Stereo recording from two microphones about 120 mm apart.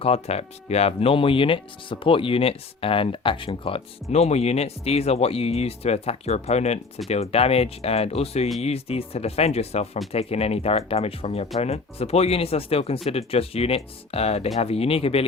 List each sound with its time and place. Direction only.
0.0 s speech: 60° left (ahead or behind)
4.1 s speech: 65° left (ahead or behind)